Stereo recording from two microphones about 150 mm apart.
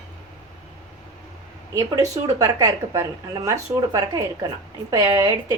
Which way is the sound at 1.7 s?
25° right (ahead or behind).